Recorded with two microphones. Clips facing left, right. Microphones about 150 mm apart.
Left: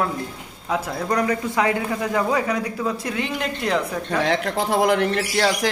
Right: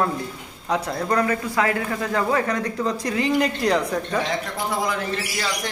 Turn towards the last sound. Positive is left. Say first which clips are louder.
# left 7 dB
turn(degrees=70)  # may be behind; listen again after turning